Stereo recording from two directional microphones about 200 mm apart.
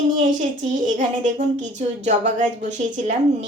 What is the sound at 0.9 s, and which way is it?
A woman's voice, 35° right (ahead or behind).